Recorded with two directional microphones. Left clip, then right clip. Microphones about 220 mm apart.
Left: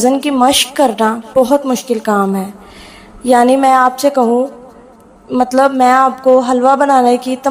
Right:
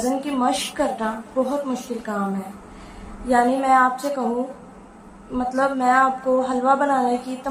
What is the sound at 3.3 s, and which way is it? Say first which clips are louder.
Speech: left 9 dB; 45° left (ahead or behind).